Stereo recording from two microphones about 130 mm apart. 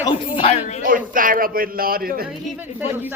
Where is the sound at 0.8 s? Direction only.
90° right.